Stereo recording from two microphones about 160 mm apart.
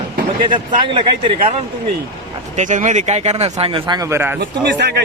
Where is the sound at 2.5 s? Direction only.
50° right (ahead or behind); by 4.3 s 15° right (ahead or behind).